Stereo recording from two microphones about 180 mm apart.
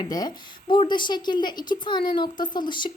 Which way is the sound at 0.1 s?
20° left (ahead or behind).